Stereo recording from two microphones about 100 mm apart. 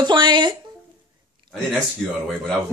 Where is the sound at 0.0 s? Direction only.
50° right (ahead or behind).